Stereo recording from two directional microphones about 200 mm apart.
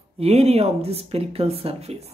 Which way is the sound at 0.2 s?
30° right (ahead or behind).